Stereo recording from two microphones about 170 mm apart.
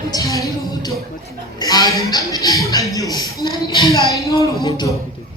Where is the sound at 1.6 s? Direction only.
25° left (ahead or behind).